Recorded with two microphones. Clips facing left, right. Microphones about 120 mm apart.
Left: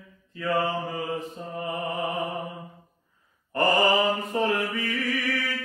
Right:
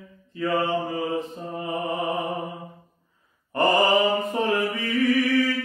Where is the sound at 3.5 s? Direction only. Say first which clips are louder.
Right 2 dB; 25° right (ahead or behind).